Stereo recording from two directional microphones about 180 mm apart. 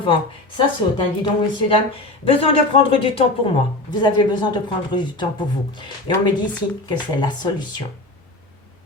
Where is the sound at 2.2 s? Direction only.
30° left (ahead or behind).